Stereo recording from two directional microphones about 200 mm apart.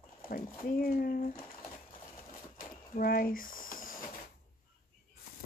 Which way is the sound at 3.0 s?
45° left (ahead or behind).